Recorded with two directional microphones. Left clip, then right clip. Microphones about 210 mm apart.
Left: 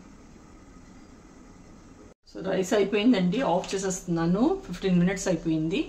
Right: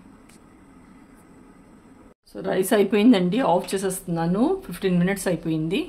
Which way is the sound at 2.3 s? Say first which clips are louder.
Right 4 dB; 40° right (ahead or behind).